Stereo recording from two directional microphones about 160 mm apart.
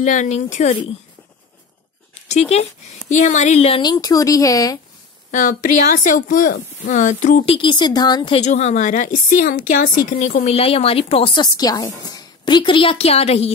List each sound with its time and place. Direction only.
0.0 s speech: 50° left (ahead or behind)
2.2 s speech: 45° left (ahead or behind)
3.8 s speech: 25° left (ahead or behind)
5.3 s speech: 55° left (ahead or behind)
7.4 s speech: 30° left (ahead or behind)
8.4 s speech: 45° left (ahead or behind)
10.4 s a woman's voice: 40° left (ahead or behind)